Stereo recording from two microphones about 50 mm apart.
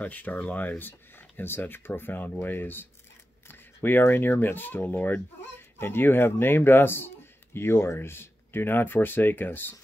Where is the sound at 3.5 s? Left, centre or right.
Left.